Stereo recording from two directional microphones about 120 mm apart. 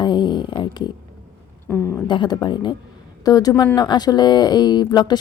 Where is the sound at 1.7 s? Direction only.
20° left (ahead or behind).